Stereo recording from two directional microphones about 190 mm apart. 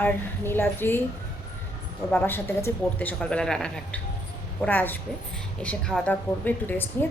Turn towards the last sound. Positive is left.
turn(degrees=10)  # may be behind; listen again after turning